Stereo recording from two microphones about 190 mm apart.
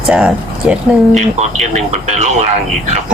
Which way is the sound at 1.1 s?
35° right (ahead or behind).